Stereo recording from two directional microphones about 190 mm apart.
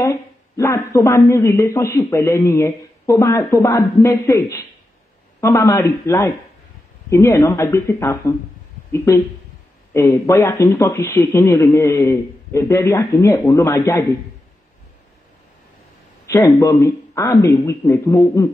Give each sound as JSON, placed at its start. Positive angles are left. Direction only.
{"t": 0.0, "sound": "speech", "side_deg": 15}
{"t": 5.4, "sound": "speech", "side_deg": 15}
{"t": 16.3, "sound": "speech", "side_deg": 20}